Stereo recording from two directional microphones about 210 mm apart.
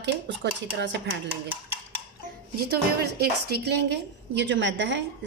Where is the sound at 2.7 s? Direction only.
50° right (ahead or behind).